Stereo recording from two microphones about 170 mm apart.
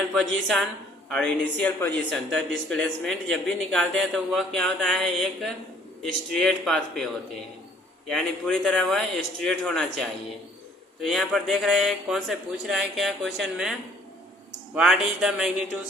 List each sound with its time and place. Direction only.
0.1 s a man's voice: centre (ahead or behind)
8.1 s a man's voice: centre (ahead or behind)
14.8 s a man's voice: 5° right (ahead or behind)